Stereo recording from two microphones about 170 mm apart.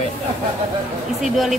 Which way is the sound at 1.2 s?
Centre (ahead or behind).